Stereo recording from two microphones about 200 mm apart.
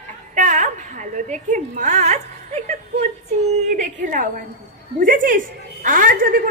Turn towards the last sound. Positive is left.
turn(degrees=-45)  # may be behind; listen again after turning